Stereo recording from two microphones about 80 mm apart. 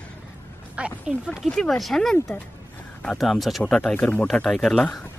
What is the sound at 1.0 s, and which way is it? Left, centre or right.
Speech, centre.